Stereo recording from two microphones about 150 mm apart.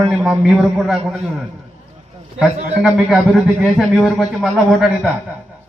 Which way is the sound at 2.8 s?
Centre (ahead or behind).